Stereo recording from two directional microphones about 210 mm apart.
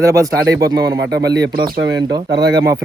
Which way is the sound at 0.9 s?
55° right (ahead or behind).